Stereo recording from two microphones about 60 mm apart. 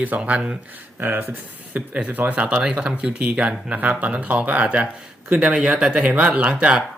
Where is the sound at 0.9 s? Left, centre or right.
Right.